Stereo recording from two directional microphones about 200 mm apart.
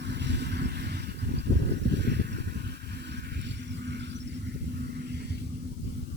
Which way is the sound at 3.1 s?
60° right (ahead or behind).